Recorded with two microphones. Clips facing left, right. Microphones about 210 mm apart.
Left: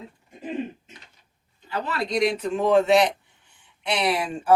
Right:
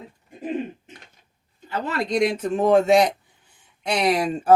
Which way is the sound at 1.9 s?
50° right (ahead or behind).